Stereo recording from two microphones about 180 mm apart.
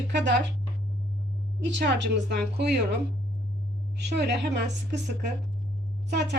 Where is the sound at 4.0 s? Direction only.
70° right (ahead or behind).